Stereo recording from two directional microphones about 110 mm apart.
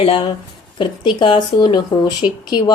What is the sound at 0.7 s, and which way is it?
Speech, 45° left (ahead or behind).